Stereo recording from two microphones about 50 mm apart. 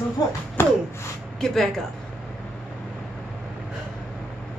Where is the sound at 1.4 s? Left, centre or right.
Centre.